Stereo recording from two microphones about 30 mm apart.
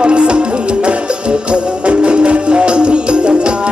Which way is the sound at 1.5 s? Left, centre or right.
Right.